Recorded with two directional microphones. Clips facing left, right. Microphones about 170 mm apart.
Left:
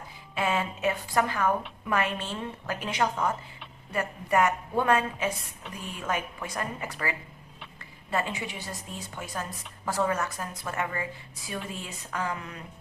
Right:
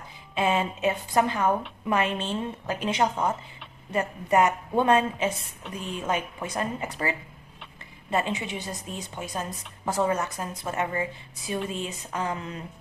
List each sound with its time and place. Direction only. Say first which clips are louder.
0.3 s a woman's voice: right 3 dB; 20° right (ahead or behind)